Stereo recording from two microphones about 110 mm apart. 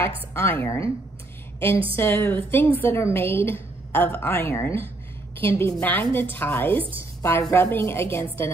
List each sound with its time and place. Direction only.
0.0 s a woman's voice: 20° left (ahead or behind)
2.0 s a woman's voice: 20° left (ahead or behind)